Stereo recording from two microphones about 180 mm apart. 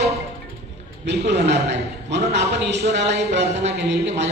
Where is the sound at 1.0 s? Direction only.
70° right (ahead or behind).